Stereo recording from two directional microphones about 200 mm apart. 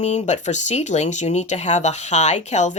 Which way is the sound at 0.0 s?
35° left (ahead or behind).